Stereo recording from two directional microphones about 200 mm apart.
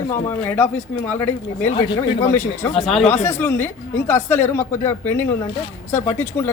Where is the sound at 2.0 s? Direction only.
25° left (ahead or behind).